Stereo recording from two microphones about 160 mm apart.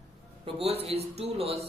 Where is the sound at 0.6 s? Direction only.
40° right (ahead or behind).